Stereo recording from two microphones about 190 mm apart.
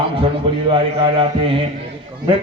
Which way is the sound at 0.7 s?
30° right (ahead or behind).